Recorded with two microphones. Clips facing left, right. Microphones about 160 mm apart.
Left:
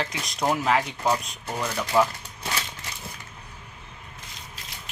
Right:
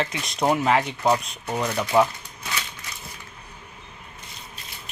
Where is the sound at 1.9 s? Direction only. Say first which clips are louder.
Right 2 dB; 20° right (ahead or behind).